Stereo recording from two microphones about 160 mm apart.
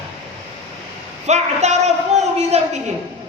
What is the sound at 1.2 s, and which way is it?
A man's voice, 45° right (ahead or behind).